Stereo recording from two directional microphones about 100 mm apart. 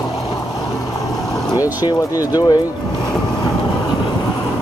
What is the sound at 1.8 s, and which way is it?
Speech, 40° left (ahead or behind).